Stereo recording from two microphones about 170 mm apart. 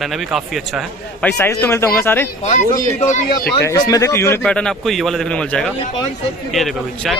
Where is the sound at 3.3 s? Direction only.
25° left (ahead or behind); by 7.1 s centre (ahead or behind).